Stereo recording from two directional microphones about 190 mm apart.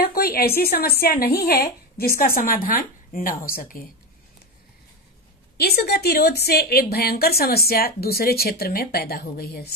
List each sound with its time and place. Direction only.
0.1 s a woman's voice: 50° left (ahead or behind)
5.6 s a woman's voice: 55° left (ahead or behind)